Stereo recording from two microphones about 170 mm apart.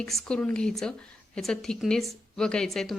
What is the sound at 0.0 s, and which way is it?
A woman's voice, centre (ahead or behind).